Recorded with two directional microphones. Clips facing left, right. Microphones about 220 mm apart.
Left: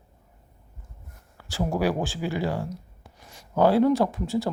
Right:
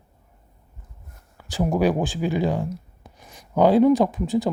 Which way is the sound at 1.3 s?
15° right (ahead or behind).